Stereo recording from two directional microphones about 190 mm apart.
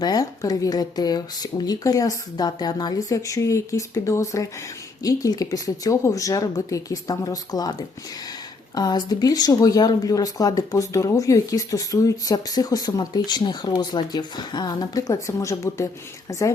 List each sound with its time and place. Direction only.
0.0 s speech: 20° left (ahead or behind)